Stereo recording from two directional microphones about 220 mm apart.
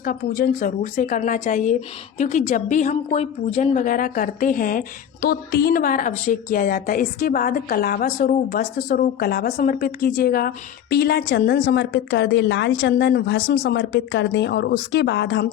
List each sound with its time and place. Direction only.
0.0 s a woman's voice: 40° left (ahead or behind)